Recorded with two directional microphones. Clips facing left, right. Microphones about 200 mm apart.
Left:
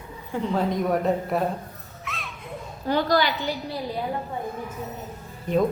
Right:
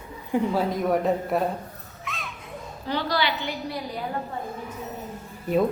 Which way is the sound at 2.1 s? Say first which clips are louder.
Even; centre (ahead or behind).